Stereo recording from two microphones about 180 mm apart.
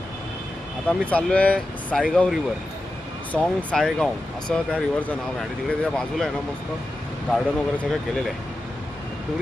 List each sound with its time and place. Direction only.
0.9 s speech: 5° left (ahead or behind)
7.3 s speech: 5° left (ahead or behind)